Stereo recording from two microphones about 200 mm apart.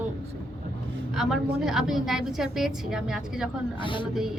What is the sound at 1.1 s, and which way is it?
A woman's voice, centre (ahead or behind).